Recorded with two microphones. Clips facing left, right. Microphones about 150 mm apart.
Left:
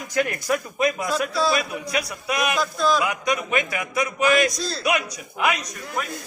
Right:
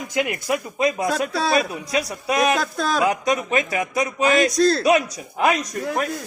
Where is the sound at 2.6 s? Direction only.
60° right (ahead or behind).